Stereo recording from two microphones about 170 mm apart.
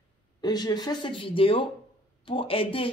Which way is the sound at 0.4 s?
25° left (ahead or behind).